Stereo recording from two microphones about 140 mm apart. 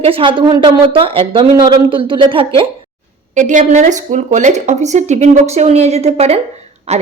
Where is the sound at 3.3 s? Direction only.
60° right (ahead or behind).